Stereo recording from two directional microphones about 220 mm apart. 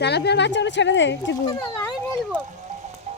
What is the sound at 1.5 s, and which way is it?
Speech, 10° left (ahead or behind).